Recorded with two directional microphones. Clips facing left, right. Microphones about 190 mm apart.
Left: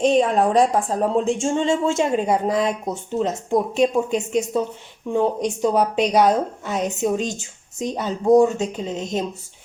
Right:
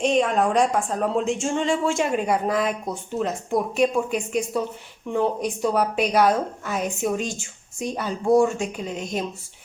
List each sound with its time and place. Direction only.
0.0 s speech: 35° left (ahead or behind)
5.6 s speech: 20° left (ahead or behind)